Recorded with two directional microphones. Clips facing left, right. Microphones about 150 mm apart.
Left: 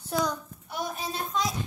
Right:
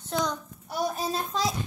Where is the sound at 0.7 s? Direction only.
35° right (ahead or behind).